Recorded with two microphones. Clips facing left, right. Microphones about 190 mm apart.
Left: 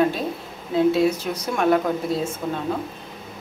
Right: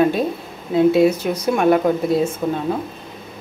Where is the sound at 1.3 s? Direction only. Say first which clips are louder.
Right 4 dB; 10° right (ahead or behind).